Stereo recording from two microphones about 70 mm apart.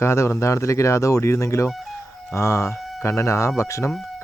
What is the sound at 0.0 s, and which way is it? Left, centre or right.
Speech, left.